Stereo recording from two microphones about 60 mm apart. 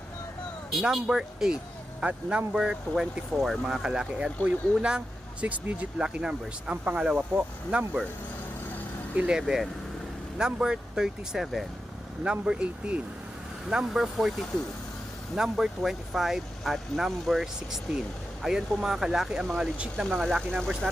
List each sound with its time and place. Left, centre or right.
0.7 s speech: centre
2.9 s speech: centre
3.7 s speech: centre
6.0 s speech: centre
7.2 s speech: right
9.1 s speech: centre
12.2 s speech: centre
13.7 s speech: centre
20.1 s speech: centre